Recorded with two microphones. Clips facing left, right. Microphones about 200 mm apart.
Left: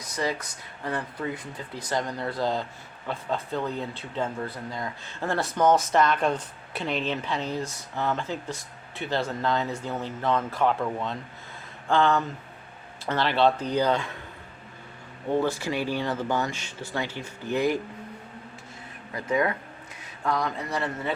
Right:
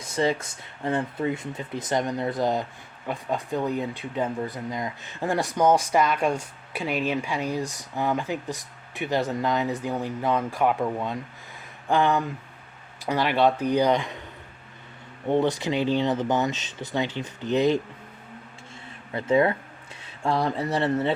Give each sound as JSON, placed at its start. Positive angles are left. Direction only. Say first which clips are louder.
{"t": 0.0, "sound": "speech", "louder": "right 5 dB", "side_deg": -25}
{"t": 15.3, "sound": "speech", "louder": "right 3 dB", "side_deg": -20}
{"t": 19.1, "sound": "speech", "louder": "right 4 dB", "side_deg": -30}